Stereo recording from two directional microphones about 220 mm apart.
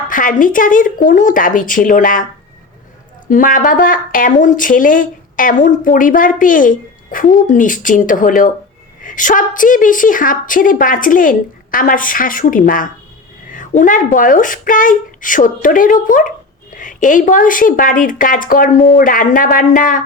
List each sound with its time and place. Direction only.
0.1 s speech: 40° left (ahead or behind)
3.2 s speech: 40° left (ahead or behind)